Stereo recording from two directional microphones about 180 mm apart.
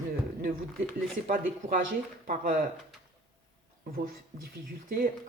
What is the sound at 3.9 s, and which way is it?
Speech, 55° right (ahead or behind).